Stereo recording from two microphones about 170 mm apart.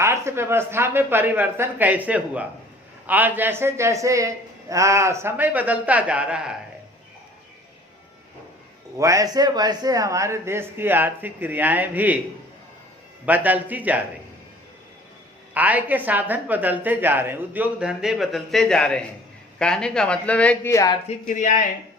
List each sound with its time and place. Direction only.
0.0 s a woman's voice: 15° right (ahead or behind)
9.0 s a woman's voice: 20° right (ahead or behind)
13.2 s a woman's voice: 10° right (ahead or behind)
15.5 s a woman's voice: 10° right (ahead or behind); by 20.7 s 10° left (ahead or behind)
20.7 s speech: 20° left (ahead or behind)
21.1 s speech: 45° left (ahead or behind)